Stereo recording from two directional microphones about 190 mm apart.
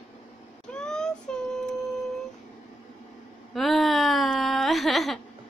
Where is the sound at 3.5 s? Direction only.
Centre (ahead or behind).